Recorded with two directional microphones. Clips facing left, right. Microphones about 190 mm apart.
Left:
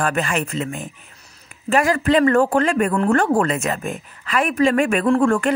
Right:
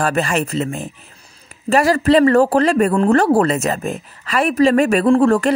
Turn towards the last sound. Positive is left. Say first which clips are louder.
# right 4 dB
turn(degrees=-35)  # may be behind; listen again after turning